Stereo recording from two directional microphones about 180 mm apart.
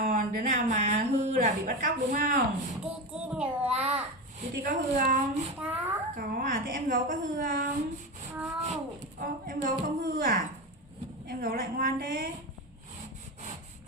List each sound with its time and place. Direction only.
0.0 s speech: 50° right (ahead or behind)
2.9 s child singing: 5° right (ahead or behind)
3.8 s speech: 40° right (ahead or behind)
5.6 s child singing: 5° right (ahead or behind)
6.1 s speech: 50° right (ahead or behind)
8.6 s speech: 45° right (ahead or behind)